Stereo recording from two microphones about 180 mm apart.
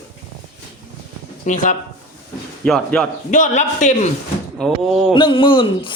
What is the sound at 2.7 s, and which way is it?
Speech, 5° left (ahead or behind).